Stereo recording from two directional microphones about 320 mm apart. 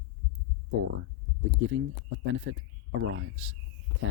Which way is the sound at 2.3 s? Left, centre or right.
Right.